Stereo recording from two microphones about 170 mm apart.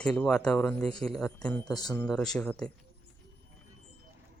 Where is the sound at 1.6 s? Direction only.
20° left (ahead or behind).